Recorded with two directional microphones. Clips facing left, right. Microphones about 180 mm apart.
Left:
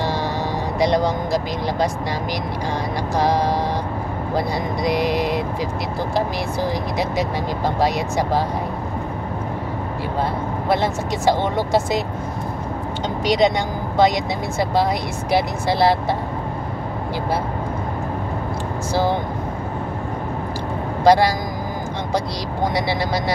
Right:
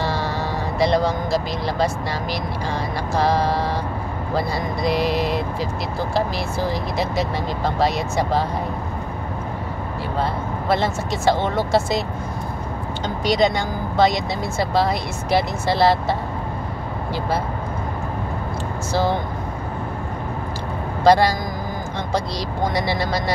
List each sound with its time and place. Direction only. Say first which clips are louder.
0.7 s speech: even; 15° left (ahead or behind)
3.2 s speech: even; 15° left (ahead or behind)
6.7 s speech: left 1 dB; 15° left (ahead or behind)
10.7 s speech: left 1 dB; 15° left (ahead or behind)
13.2 s speech: left 1 dB; 20° left (ahead or behind)
21.0 s speech: even; 10° left (ahead or behind)
22.8 s speech: left 1 dB; 10° left (ahead or behind)